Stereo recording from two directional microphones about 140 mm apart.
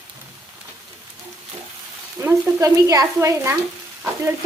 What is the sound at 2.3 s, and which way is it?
Stir, 20° right (ahead or behind).